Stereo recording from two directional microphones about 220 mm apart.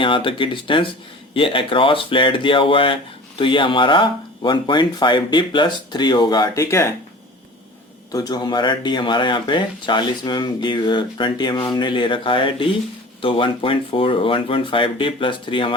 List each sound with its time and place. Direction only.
0.0 s speech: 25° left (ahead or behind)
8.1 s speech: 15° left (ahead or behind)